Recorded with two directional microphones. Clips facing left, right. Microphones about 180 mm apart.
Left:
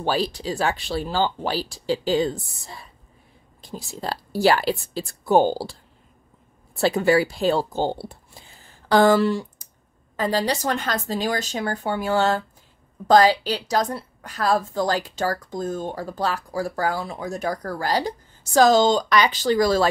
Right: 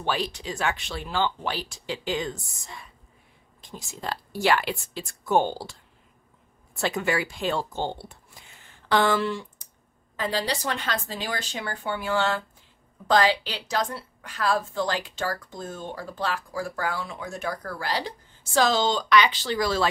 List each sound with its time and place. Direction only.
0.0 s a woman's voice: 35° left (ahead or behind)